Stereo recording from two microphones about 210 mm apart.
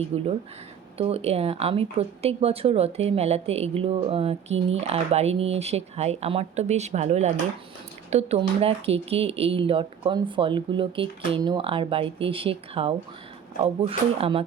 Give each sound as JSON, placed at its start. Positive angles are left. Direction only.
{"t": 0.1, "sound": "speech", "side_deg": -30}